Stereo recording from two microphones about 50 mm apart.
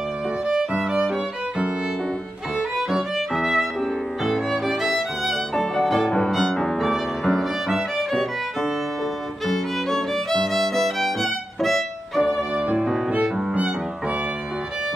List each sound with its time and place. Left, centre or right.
0.5 s music: centre
2.9 s music: centre
4.3 s violin: centre
6.3 s music: centre
9.5 s music: centre
12.5 s music: centre